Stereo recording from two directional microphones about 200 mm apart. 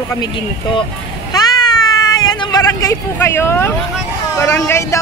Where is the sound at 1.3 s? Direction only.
20° left (ahead or behind).